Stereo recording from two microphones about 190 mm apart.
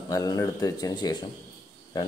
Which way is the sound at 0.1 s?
20° left (ahead or behind).